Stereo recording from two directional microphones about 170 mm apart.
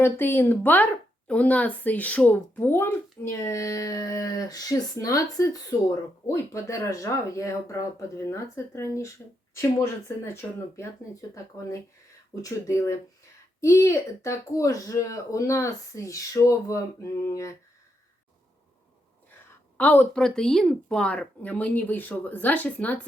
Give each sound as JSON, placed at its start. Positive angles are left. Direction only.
{"t": 0.0, "sound": "speech", "side_deg": 10}
{"t": 19.7, "sound": "speech", "side_deg": 10}